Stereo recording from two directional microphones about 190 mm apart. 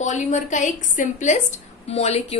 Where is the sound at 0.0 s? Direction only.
40° left (ahead or behind).